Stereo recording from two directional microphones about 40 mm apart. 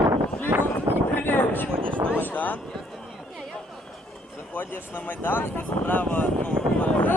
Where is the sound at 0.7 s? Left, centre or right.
Left.